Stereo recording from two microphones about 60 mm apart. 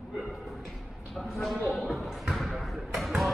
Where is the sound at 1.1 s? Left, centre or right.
Centre.